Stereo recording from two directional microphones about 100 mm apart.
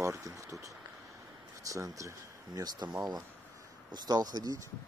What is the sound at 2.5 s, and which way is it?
Speech, 45° right (ahead or behind).